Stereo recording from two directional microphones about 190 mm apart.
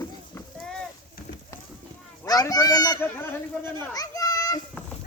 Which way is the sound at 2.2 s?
20° left (ahead or behind).